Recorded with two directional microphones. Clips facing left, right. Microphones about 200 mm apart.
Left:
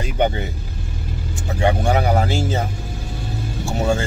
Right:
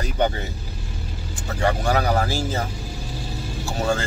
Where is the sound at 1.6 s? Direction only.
20° left (ahead or behind).